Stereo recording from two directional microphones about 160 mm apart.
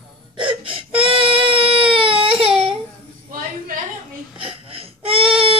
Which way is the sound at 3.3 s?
60° right (ahead or behind).